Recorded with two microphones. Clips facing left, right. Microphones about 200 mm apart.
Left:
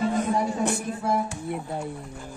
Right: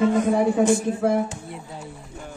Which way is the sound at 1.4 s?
55° left (ahead or behind).